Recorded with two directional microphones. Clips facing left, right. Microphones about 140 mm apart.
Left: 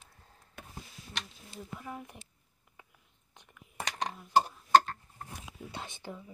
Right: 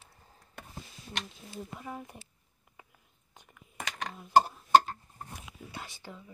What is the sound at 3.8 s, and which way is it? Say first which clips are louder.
Dishes: left 2 dB; 30° left (ahead or behind).